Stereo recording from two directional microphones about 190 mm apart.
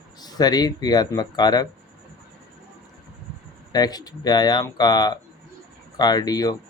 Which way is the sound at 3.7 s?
20° left (ahead or behind).